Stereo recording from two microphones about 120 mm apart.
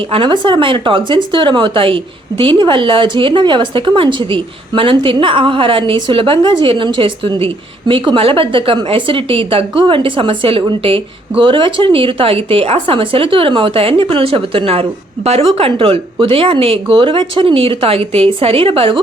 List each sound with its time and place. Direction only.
0.1 s a woman's voice: 45° right (ahead or behind)